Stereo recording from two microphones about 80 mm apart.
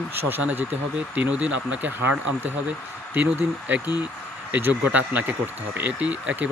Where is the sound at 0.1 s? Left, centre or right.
Right.